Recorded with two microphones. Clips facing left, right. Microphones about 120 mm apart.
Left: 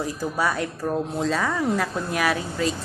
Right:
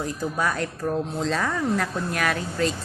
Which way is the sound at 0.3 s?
5° left (ahead or behind).